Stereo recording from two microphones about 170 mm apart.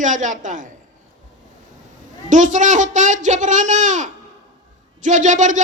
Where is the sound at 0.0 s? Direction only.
45° right (ahead or behind).